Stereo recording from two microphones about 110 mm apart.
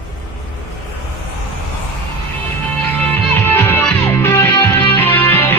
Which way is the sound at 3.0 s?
20° left (ahead or behind).